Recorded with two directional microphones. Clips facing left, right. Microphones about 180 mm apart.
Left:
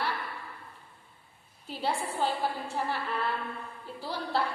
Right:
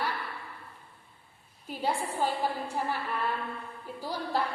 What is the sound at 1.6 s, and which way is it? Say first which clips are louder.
Speech: right 1 dB; 10° right (ahead or behind).